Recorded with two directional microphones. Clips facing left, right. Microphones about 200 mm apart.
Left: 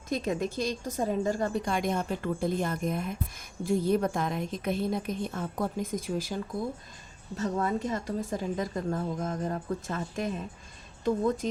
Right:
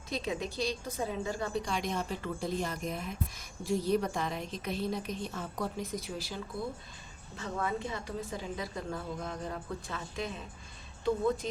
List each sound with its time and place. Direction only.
0.1 s a woman's voice: 50° left (ahead or behind)